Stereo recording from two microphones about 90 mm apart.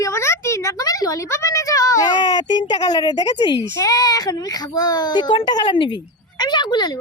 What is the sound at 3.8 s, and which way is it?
A child's voice, 40° left (ahead or behind).